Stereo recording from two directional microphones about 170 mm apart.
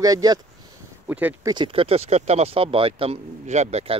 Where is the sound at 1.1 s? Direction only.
10° right (ahead or behind).